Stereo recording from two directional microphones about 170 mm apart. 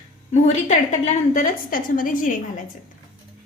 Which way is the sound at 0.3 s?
40° left (ahead or behind).